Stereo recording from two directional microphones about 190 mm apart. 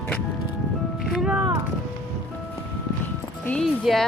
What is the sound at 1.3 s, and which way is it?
Music, 15° right (ahead or behind).